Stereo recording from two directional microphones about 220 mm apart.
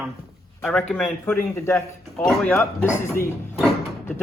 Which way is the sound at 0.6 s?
5° left (ahead or behind).